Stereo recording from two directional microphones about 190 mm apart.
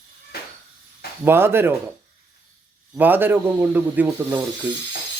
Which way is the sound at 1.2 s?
10° right (ahead or behind).